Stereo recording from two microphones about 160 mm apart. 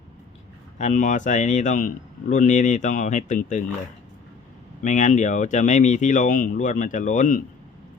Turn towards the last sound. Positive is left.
turn(degrees=55)  # may be behind; listen again after turning